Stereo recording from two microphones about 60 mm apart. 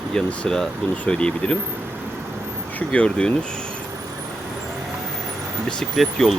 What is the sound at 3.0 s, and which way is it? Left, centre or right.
Speech, centre.